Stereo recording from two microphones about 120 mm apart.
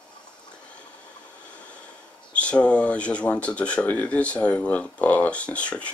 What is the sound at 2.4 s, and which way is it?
Speech, 10° left (ahead or behind).